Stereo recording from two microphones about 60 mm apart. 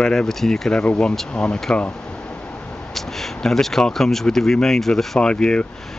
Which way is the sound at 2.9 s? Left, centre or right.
Centre.